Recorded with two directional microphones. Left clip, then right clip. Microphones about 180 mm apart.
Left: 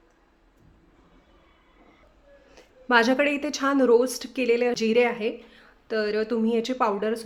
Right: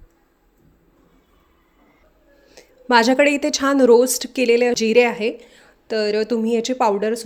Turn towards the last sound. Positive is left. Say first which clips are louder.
# right 6 dB
turn(degrees=-25)  # may be behind; listen again after turning